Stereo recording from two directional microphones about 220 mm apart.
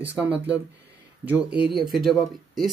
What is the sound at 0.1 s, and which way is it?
Speech, 5° right (ahead or behind).